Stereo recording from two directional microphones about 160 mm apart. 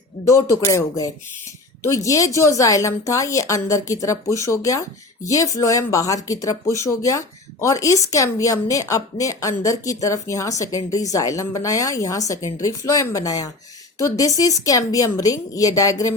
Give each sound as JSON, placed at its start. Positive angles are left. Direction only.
{"t": 0.3, "sound": "speech", "side_deg": 20}